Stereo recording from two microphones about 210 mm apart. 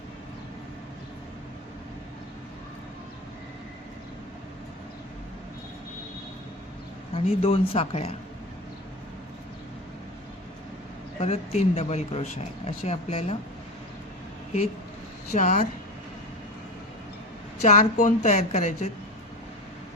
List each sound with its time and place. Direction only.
7.3 s a woman's voice: 30° left (ahead or behind)
11.2 s speech: 30° left (ahead or behind)
15.3 s speech: 35° left (ahead or behind)
17.6 s speech: 35° left (ahead or behind)